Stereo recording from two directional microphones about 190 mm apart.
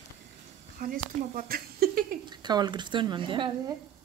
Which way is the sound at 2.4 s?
20° right (ahead or behind).